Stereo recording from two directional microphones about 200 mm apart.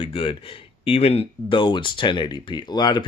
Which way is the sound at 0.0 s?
25° left (ahead or behind).